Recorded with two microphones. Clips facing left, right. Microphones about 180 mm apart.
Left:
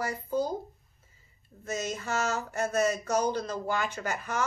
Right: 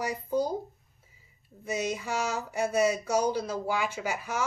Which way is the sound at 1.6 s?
10° right (ahead or behind).